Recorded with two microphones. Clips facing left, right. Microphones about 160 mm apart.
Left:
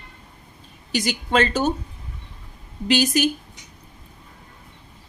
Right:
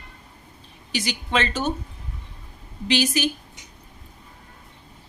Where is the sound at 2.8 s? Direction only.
45° left (ahead or behind).